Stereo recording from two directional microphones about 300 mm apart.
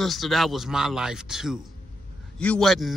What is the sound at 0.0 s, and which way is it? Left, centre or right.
A man's voice, centre.